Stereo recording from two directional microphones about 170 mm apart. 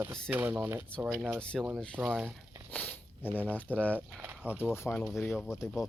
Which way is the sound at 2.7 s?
10° left (ahead or behind).